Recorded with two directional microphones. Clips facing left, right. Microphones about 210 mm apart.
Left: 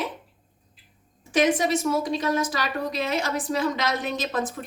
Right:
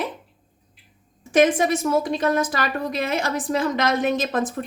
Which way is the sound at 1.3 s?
50° right (ahead or behind).